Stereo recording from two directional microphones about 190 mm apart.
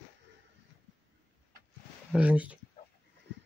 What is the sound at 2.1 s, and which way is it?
Speech, 5° right (ahead or behind).